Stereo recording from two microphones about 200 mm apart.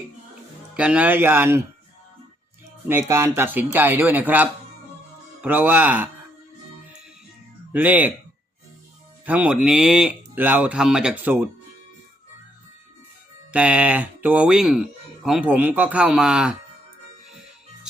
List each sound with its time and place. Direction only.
0.7 s speech: 5° right (ahead or behind)
2.8 s speech: 10° right (ahead or behind)
7.7 s speech: 10° right (ahead or behind)
9.2 s speech: 5° right (ahead or behind)
13.5 s speech: 5° right (ahead or behind)